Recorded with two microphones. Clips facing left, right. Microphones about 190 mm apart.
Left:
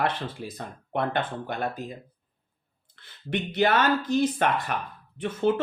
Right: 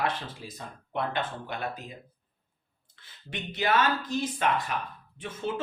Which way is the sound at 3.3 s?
60° left (ahead or behind).